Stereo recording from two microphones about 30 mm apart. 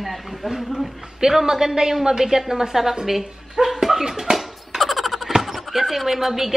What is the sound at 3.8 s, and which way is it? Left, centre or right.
Dog, centre.